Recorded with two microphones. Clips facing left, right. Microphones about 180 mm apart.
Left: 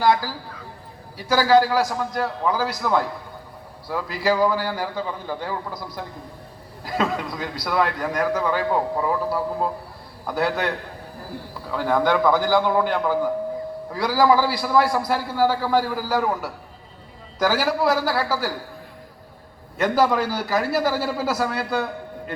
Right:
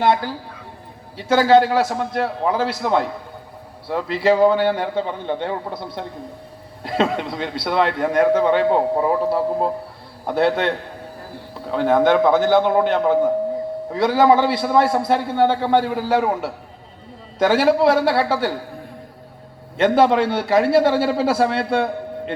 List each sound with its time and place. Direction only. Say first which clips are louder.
0.0 s a man's voice: right 2 dB; 25° right (ahead or behind)
19.7 s a man's voice: right 5 dB; 25° right (ahead or behind)